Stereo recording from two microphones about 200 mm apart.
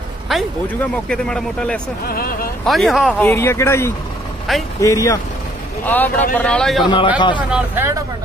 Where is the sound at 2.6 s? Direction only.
Centre (ahead or behind).